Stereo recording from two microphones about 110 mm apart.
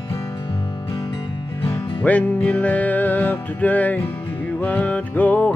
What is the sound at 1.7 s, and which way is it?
Music, 15° left (ahead or behind).